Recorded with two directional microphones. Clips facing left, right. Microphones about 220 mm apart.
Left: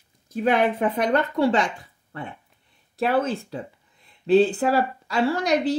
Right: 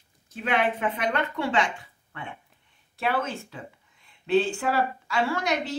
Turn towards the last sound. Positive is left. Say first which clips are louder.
# left 6 dB
turn(degrees=35)  # may be behind; listen again after turning